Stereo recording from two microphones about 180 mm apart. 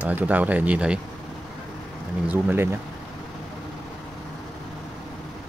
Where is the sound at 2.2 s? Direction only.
10° right (ahead or behind).